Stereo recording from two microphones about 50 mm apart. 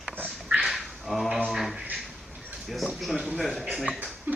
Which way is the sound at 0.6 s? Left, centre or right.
Centre.